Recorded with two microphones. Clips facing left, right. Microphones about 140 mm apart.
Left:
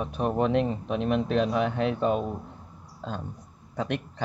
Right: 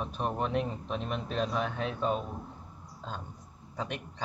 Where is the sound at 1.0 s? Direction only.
80° left.